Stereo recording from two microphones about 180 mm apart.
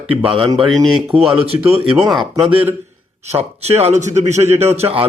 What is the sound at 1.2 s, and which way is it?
Speech, 35° right (ahead or behind).